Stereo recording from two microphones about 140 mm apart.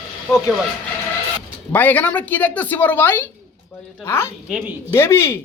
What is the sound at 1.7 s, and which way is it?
A woman's voice, 15° left (ahead or behind).